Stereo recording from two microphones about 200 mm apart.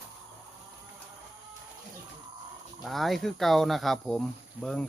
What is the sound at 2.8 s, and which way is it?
Speech, centre (ahead or behind).